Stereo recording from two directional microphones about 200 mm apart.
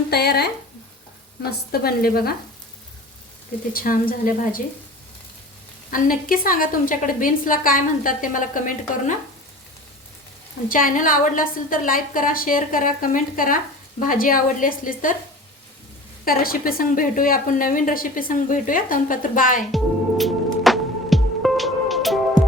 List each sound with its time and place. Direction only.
0.1 s speech: 55° left (ahead or behind)
1.5 s a woman's voice: 50° left (ahead or behind)
3.7 s a woman's voice: 45° left (ahead or behind)
5.9 s a woman's voice: 45° left (ahead or behind)
10.7 s a woman's voice: 45° left (ahead or behind)
16.2 s a woman's voice: 45° left (ahead or behind)
19.7 s music: centre (ahead or behind)